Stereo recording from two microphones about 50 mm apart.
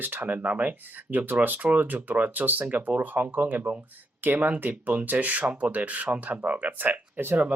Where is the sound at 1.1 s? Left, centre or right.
Right.